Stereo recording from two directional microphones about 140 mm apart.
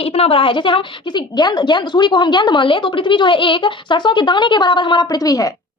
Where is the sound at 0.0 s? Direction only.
45° left (ahead or behind).